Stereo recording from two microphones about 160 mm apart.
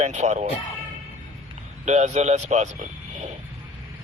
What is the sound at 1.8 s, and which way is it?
Speech, 45° right (ahead or behind).